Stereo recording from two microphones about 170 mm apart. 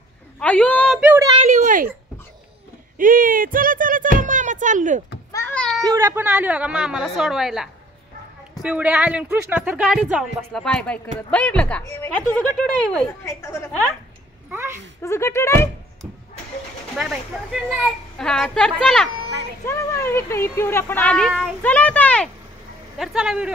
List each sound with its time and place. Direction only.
0.4 s speech: 5° left (ahead or behind)
0.9 s speech: 10° right (ahead or behind)
1.4 s a child's voice: 45° right (ahead or behind)
3.0 s speech: 55° right (ahead or behind)
5.3 s a sound: 10° left (ahead or behind)
5.8 s speech: 20° right (ahead or behind); by 13.7 s 15° left (ahead or behind)
14.5 s a sound: 15° right (ahead or behind)
15.0 s speech: 15° left (ahead or behind)
16.9 s speech: centre (ahead or behind)
19.6 s speech: 15° left (ahead or behind); by 23.5 s 5° right (ahead or behind)